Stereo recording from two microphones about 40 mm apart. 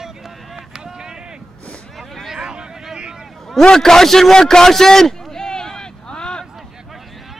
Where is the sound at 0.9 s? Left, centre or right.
Centre.